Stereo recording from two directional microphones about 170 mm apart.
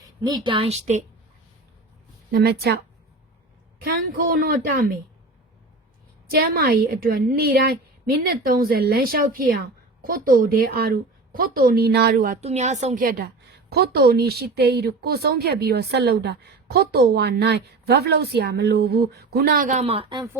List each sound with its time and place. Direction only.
0.2 s speech: 25° right (ahead or behind); by 1.0 s 40° right (ahead or behind)
2.3 s a woman's voice: 65° right (ahead or behind)
4.3 s a woman's voice: 60° right (ahead or behind)
6.3 s a woman's voice: 60° right (ahead or behind)
12.4 s a woman's voice: 40° right (ahead or behind)